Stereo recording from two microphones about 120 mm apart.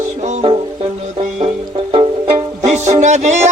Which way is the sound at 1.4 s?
55° right (ahead or behind).